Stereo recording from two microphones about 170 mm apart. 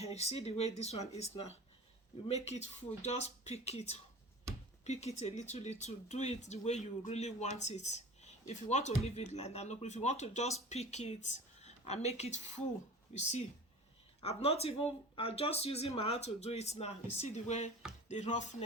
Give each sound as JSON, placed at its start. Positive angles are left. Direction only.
{"t": 0.0, "sound": "speech", "side_deg": 40}
{"t": 13.1, "sound": "music", "side_deg": 45}
{"t": 14.2, "sound": "speech", "side_deg": 35}
{"t": 18.1, "sound": "music", "side_deg": 45}